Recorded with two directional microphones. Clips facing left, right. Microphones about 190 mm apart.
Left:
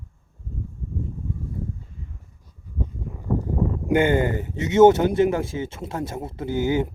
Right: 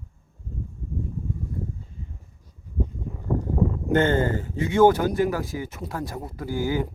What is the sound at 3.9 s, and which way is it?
Speech, 15° left (ahead or behind).